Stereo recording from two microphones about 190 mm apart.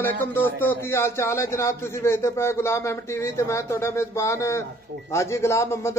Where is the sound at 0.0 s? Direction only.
10° left (ahead or behind).